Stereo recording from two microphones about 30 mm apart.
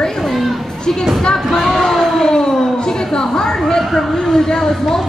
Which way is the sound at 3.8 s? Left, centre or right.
Centre.